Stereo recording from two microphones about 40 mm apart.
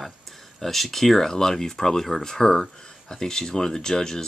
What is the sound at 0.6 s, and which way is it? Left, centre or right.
Speech, centre.